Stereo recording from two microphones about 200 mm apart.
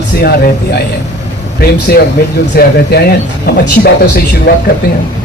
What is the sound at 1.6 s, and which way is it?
A man's voice, 50° left (ahead or behind).